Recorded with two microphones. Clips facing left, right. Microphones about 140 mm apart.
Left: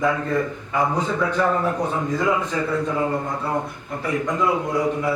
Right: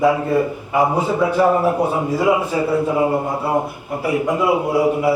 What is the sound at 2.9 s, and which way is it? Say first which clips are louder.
Speech: right 5 dB; 20° right (ahead or behind).